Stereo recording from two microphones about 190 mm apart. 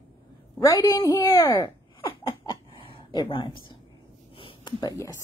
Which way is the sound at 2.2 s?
25° left (ahead or behind).